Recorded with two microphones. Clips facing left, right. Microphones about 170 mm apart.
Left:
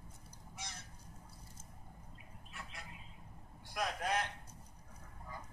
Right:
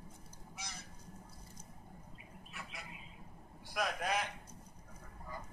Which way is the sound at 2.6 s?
65° right (ahead or behind).